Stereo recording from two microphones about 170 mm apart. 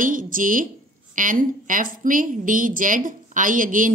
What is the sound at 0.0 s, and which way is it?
A woman's voice, 50° right (ahead or behind).